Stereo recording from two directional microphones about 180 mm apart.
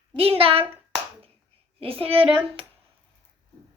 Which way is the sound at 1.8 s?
30° right (ahead or behind).